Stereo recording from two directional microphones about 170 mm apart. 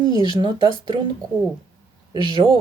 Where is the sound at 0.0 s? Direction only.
25° right (ahead or behind).